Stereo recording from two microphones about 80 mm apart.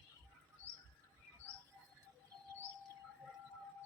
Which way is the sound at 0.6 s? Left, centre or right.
Left.